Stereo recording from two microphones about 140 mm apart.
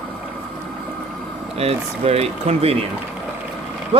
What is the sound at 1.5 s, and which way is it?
Speech, 45° right (ahead or behind).